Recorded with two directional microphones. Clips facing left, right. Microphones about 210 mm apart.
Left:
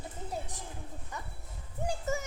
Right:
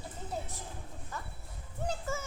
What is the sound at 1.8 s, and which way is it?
Music, 15° left (ahead or behind).